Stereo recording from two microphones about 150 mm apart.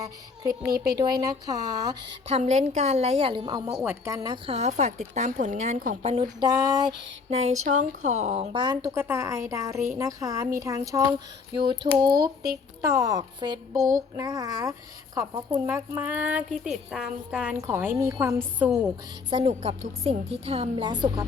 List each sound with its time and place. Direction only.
0.0 s speech: 25° right (ahead or behind)
2.2 s a woman's voice: 45° right (ahead or behind); by 4.4 s 25° right (ahead or behind)
4.4 s a woman's voice: 45° right (ahead or behind)
6.2 s speech: 25° right (ahead or behind)
7.3 s a woman's voice: 45° right (ahead or behind)
8.5 s a woman's voice: 25° right (ahead or behind)
18.6 s speech: 5° right (ahead or behind)
19.3 s a woman's voice: 40° right (ahead or behind)